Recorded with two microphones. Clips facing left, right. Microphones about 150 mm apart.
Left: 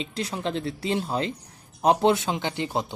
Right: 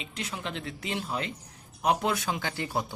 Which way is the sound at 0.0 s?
35° left (ahead or behind).